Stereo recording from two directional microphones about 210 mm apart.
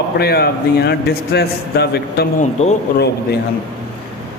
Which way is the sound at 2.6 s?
30° left (ahead or behind).